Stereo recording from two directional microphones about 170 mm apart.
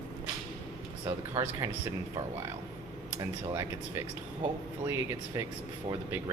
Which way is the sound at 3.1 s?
15° right (ahead or behind).